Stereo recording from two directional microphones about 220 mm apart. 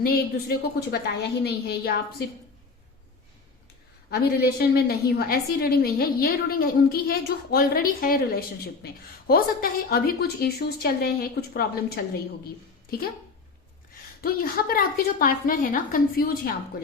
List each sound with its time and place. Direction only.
0.0 s a woman's voice: 45° left (ahead or behind)
4.1 s a woman's voice: 45° left (ahead or behind)
14.2 s a woman's voice: 40° left (ahead or behind)